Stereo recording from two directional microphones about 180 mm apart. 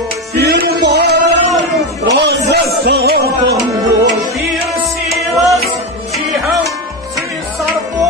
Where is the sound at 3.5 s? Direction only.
20° right (ahead or behind).